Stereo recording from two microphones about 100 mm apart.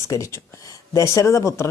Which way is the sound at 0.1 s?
35° left (ahead or behind).